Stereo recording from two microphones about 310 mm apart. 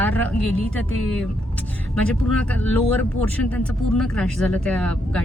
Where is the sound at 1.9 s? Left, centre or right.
Centre.